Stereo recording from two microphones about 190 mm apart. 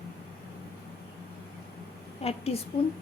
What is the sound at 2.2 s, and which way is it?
Speech, 30° left (ahead or behind).